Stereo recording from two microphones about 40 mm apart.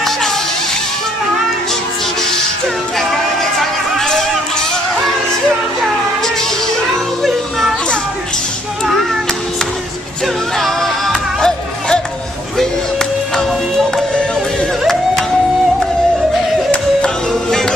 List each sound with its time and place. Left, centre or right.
4.0 s music: centre
10.2 s music: centre
11.1 s music: centre
12.5 s music: centre
17.3 s music: centre